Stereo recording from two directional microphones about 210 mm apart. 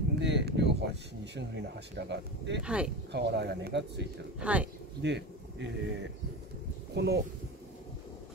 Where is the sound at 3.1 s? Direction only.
55° right (ahead or behind).